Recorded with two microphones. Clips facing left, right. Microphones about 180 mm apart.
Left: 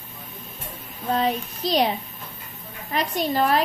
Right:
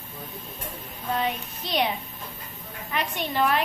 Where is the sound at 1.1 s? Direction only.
35° left (ahead or behind).